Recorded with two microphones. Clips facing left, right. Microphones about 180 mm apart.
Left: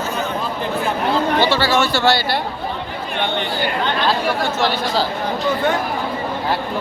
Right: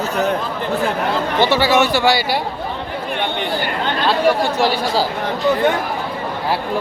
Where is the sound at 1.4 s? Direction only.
20° right (ahead or behind).